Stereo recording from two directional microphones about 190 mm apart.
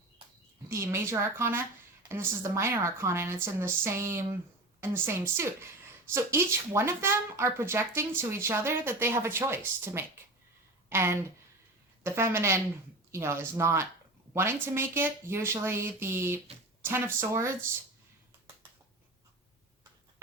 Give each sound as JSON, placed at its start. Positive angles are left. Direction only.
{"t": 0.7, "sound": "a woman's voice", "side_deg": -15}